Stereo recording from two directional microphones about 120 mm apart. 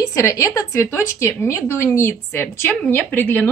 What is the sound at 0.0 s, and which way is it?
Speech, 25° left (ahead or behind).